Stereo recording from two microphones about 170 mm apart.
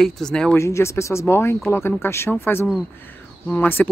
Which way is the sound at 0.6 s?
15° left (ahead or behind).